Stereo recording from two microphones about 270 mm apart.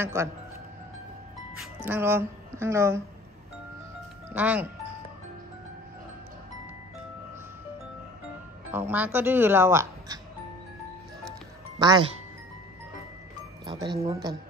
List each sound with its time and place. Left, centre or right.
0.0 s speech: centre
1.9 s speech: centre
4.3 s speech: centre
8.7 s speech: centre
11.8 s speech: centre
13.7 s speech: centre